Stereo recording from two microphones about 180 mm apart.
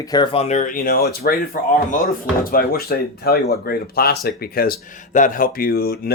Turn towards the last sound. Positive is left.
turn(degrees=60)  # may be behind; listen again after turning